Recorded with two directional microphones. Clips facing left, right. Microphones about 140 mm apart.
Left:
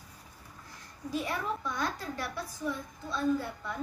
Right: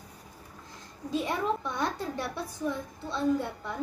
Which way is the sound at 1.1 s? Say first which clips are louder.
Right 4 dB; 25° right (ahead or behind).